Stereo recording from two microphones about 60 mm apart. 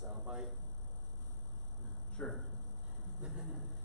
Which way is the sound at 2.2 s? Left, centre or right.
Left.